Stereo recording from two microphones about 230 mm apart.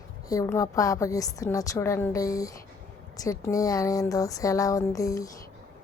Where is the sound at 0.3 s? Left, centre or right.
Centre.